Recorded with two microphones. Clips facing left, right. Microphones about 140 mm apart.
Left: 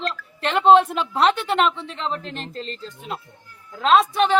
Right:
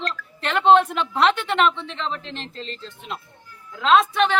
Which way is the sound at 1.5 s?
35° left (ahead or behind).